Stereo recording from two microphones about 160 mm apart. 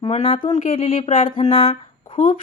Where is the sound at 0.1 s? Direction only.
35° left (ahead or behind).